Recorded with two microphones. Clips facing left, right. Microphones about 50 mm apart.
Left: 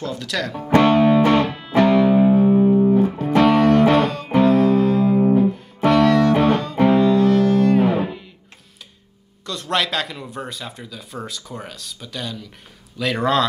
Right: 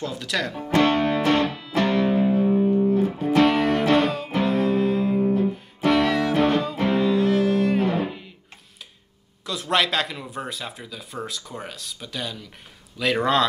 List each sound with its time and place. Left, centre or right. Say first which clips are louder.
0.0 s speech: left 2 dB; centre
0.7 s music: left 6 dB; centre
1.4 s music: left 5 dB; left
2.9 s music: left 4 dB; centre
3.3 s music: left 4 dB; centre
5.2 s music: left 6 dB; left
5.9 s music: left 5 dB; centre
7.8 s guitar: left 4 dB; centre
9.5 s speech: even; centre